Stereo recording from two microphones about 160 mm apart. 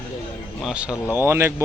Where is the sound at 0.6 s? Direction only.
5° right (ahead or behind).